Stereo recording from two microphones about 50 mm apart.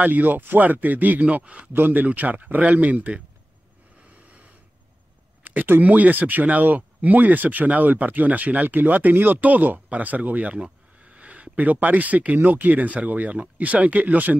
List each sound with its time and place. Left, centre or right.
0.0 s speech: right
1.7 s speech: right
5.4 s speech: right